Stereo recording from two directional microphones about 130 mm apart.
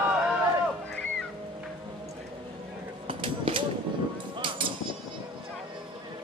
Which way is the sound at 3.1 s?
40° right (ahead or behind).